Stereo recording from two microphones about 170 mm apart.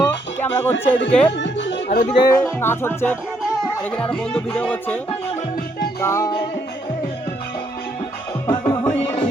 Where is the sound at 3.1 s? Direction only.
5° right (ahead or behind).